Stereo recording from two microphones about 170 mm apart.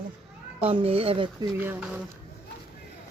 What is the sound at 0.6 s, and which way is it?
Speech, 35° right (ahead or behind).